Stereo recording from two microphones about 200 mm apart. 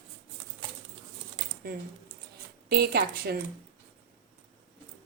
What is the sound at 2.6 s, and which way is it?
Speech, 50° right (ahead or behind).